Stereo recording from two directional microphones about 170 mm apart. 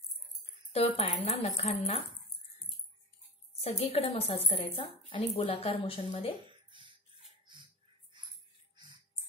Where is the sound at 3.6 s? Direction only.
40° left (ahead or behind).